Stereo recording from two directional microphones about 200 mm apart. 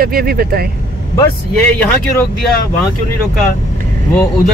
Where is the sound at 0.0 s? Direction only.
50° right (ahead or behind).